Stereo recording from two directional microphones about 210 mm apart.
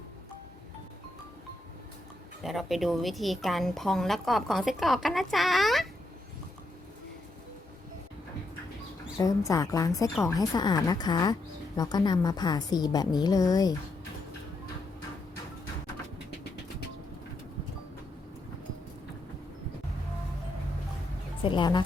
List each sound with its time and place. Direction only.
2.4 s a woman's voice: centre (ahead or behind)
9.1 s a woman's voice: 15° left (ahead or behind)
21.4 s speech: 20° left (ahead or behind)